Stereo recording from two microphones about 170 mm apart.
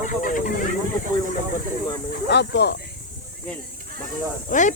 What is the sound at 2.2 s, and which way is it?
Speech, 90° left.